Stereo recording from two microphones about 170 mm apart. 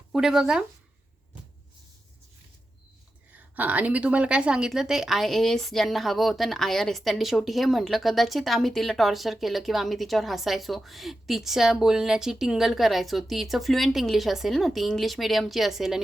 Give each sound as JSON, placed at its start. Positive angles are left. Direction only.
{"t": 0.1, "sound": "a woman's voice", "side_deg": -5}
{"t": 3.3, "sound": "a woman's voice", "side_deg": -10}